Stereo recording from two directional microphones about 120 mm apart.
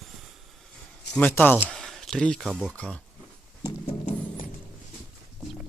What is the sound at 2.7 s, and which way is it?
Speech, 10° left (ahead or behind).